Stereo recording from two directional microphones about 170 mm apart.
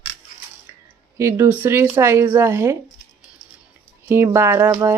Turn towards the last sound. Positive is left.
turn(degrees=-15)  # may be behind; listen again after turning